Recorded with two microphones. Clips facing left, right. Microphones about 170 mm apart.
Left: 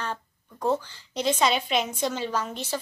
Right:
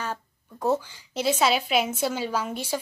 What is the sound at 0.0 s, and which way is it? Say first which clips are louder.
A woman's voice: even; 10° right (ahead or behind).